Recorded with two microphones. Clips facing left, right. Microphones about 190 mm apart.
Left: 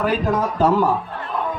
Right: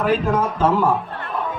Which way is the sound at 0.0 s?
40° left (ahead or behind).